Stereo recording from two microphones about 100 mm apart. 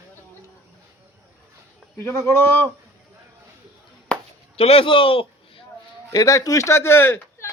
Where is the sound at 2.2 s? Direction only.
25° left (ahead or behind).